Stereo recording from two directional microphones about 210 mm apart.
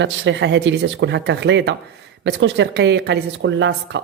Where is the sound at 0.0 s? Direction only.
60° right (ahead or behind).